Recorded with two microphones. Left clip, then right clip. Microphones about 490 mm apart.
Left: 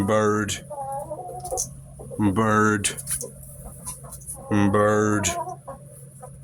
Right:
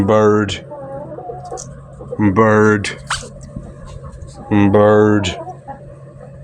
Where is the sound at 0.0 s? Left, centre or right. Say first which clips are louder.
Right 9 dB; left.